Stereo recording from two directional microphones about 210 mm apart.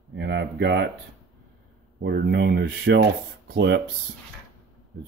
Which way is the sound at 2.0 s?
50° right (ahead or behind).